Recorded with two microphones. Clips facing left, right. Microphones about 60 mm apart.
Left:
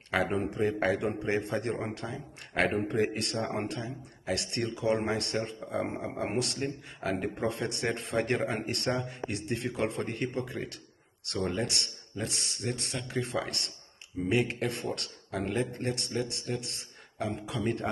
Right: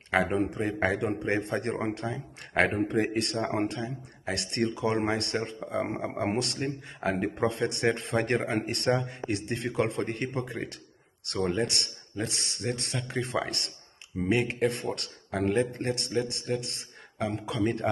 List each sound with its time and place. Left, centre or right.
0.1 s a man's voice: right